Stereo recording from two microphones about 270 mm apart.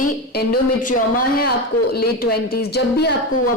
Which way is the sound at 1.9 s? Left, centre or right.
Left.